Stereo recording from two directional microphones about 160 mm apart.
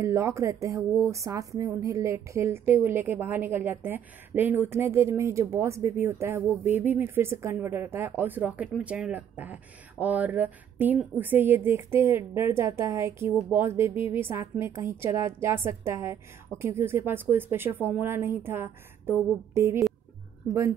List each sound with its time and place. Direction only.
0.0 s speech: 20° right (ahead or behind)